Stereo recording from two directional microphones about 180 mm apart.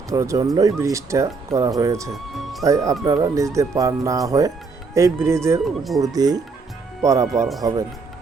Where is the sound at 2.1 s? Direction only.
Centre (ahead or behind).